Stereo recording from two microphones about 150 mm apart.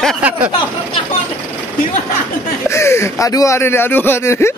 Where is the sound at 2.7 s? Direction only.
20° left (ahead or behind).